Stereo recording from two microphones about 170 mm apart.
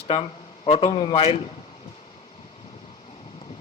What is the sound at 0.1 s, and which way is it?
A man's voice, 35° left (ahead or behind).